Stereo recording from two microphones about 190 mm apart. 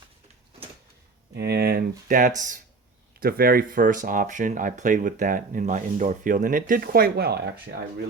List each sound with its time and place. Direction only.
1.3 s speech: 60° right (ahead or behind)